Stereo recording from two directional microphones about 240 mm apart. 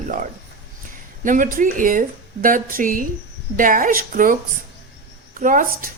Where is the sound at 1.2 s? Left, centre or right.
Right.